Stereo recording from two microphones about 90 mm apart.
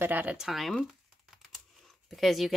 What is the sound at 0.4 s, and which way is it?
Speech, centre (ahead or behind).